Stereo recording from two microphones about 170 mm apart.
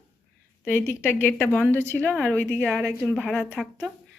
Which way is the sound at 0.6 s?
15° left (ahead or behind).